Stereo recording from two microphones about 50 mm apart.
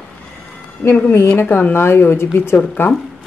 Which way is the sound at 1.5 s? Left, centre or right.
Left.